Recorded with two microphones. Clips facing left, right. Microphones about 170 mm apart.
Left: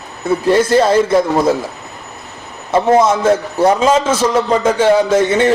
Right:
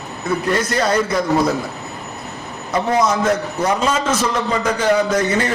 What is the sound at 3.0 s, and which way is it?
A man's voice, 25° left (ahead or behind).